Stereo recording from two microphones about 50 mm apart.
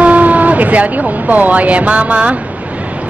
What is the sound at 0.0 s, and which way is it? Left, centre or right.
A woman's voice, right.